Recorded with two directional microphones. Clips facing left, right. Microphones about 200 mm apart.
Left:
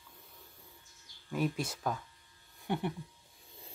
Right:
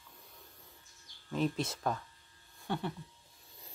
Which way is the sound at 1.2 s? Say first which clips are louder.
Even; 10° left (ahead or behind).